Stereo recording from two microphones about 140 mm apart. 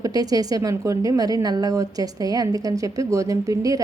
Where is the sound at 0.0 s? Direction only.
25° right (ahead or behind).